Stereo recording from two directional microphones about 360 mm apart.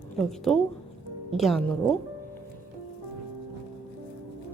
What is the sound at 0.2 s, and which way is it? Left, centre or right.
A woman's voice, centre.